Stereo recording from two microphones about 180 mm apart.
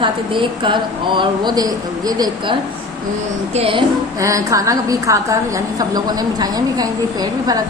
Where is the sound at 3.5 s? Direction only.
30° right (ahead or behind).